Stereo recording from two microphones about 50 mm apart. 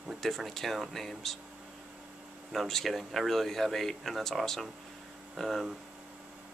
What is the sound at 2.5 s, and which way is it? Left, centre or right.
A man's voice, centre.